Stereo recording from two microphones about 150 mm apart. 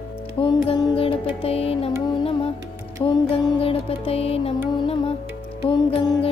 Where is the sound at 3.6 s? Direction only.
40° left (ahead or behind).